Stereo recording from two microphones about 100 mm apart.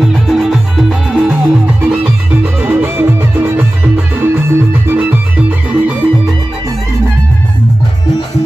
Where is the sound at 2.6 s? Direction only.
20° right (ahead or behind).